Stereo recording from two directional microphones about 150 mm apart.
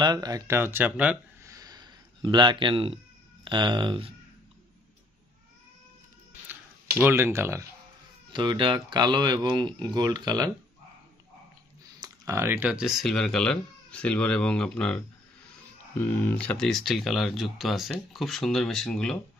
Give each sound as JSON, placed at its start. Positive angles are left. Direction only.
{"t": 0.0, "sound": "speech", "side_deg": -25}
{"t": 1.4, "sound": "a sound", "side_deg": -25}
{"t": 3.4, "sound": "speech", "side_deg": -30}
{"t": 7.0, "sound": "speech", "side_deg": -15}
{"t": 8.3, "sound": "speech", "side_deg": -30}
{"t": 12.0, "sound": "speech", "side_deg": -20}
{"t": 16.0, "sound": "speech", "side_deg": 15}